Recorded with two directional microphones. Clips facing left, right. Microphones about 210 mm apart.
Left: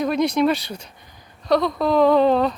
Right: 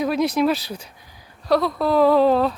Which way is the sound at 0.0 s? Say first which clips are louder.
Left 1 dB; 5° right (ahead or behind).